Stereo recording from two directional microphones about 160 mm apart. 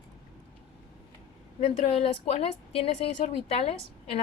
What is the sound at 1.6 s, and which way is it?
A woman's voice, 35° left (ahead or behind).